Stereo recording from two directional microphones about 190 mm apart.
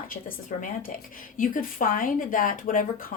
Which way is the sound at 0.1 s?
50° left (ahead or behind).